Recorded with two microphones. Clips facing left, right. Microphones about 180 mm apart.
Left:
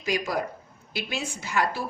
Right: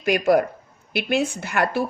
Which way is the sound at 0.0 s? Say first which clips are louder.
Right 9 dB; 60° right (ahead or behind).